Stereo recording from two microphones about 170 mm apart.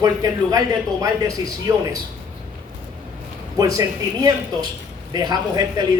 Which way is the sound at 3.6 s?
20° right (ahead or behind).